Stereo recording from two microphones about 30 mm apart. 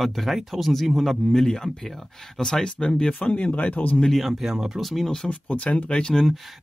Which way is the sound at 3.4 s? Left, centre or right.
Left.